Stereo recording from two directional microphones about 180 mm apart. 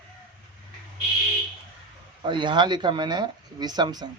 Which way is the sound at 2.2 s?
25° right (ahead or behind).